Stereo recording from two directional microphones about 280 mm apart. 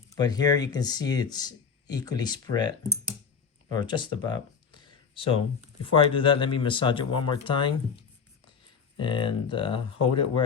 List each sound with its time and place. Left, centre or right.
0.2 s speech: centre
3.7 s a sound: centre
5.8 s speech: centre
9.0 s speech: centre